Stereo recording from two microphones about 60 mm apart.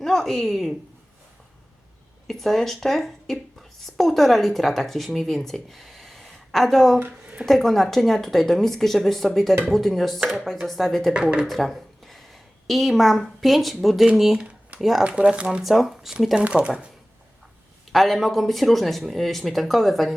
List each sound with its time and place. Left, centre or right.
0.0 s a woman's voice: centre
2.2 s speech: centre
11.1 s speech: centre
11.4 s speech: centre
15.0 s speech: centre
15.4 s speech: centre
16.4 s speech: centre
17.9 s speech: centre